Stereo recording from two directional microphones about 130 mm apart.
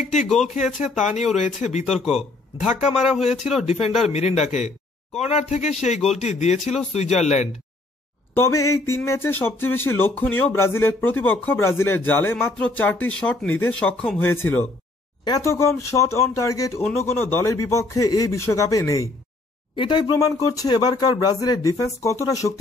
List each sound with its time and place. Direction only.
0.0 s a man's voice: 80° left; by 1.9 s 65° left (ahead or behind)
1.9 s speech: centre (ahead or behind)
3.8 s a man's voice: 55° left (ahead or behind)
8.4 s speech: 20° left (ahead or behind)
19.7 s speech: 35° left (ahead or behind)